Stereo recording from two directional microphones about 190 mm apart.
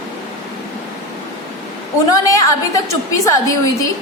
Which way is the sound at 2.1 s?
15° left (ahead or behind).